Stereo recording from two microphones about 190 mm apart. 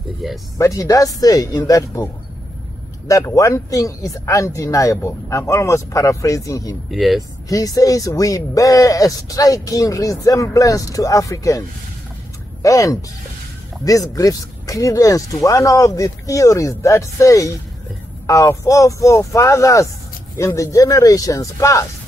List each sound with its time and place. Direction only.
0.2 s speech: centre (ahead or behind)
0.6 s speech: 15° left (ahead or behind)
3.1 s speech: 15° left (ahead or behind)
6.9 s speech: centre (ahead or behind)
7.4 s speech: 20° left (ahead or behind)
12.6 s speech: 15° left (ahead or behind)